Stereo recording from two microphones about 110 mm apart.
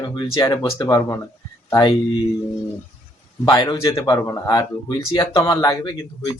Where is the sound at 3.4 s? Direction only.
40° left (ahead or behind).